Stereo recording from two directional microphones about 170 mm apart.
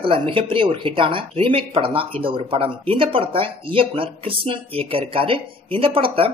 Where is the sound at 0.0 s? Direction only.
30° right (ahead or behind).